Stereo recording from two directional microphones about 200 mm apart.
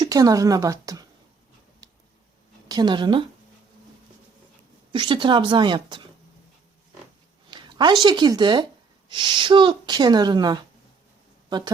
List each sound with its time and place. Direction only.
0.0 s a woman's voice: 20° right (ahead or behind)
1.8 s a sound: 20° right (ahead or behind)
2.6 s a woman's voice: 20° right (ahead or behind)
4.9 s speech: 25° right (ahead or behind)
7.5 s a sound: 20° right (ahead or behind)
8.0 s speech: 20° right (ahead or behind)